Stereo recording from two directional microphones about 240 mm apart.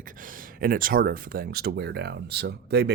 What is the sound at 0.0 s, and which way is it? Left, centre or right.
Speech, right.